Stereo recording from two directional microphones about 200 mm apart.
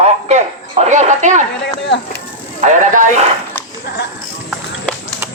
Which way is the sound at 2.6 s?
35° right (ahead or behind).